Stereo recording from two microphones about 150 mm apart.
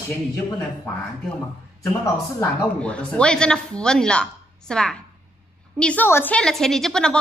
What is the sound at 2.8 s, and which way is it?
A woman's voice, 5° left (ahead or behind).